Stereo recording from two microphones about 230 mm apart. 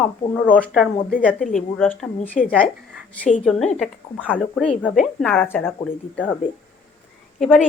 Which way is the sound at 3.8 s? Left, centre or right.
Centre.